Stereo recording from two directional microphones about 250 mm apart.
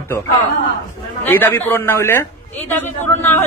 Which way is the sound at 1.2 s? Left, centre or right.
Centre.